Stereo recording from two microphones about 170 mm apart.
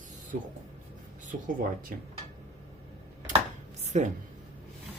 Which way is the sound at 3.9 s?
45° right (ahead or behind).